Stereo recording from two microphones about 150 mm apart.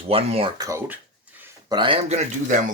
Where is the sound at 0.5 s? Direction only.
20° right (ahead or behind).